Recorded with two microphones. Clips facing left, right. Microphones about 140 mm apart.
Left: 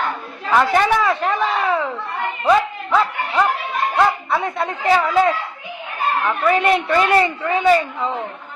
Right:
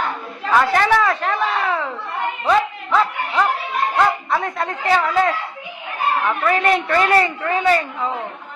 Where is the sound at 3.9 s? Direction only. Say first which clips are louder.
Left 1 dB; 5° left (ahead or behind).